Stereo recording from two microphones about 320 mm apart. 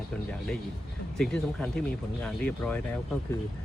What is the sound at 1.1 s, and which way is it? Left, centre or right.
Speech, centre.